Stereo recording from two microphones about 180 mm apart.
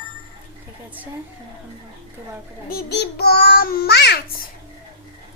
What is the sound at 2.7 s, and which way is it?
A child's voice, 60° left (ahead or behind).